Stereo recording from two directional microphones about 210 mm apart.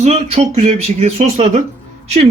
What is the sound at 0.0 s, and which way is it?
Speech, 30° right (ahead or behind).